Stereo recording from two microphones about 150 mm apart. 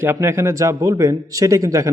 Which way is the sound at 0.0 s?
15° right (ahead or behind).